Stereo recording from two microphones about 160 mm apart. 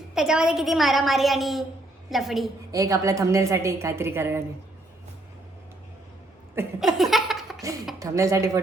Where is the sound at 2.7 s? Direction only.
20° right (ahead or behind).